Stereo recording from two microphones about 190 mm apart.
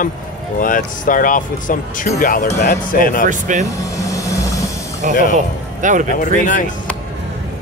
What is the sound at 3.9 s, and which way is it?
Train, 15° left (ahead or behind).